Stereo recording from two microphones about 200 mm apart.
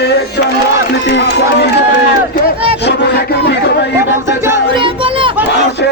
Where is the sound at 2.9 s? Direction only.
55° left (ahead or behind).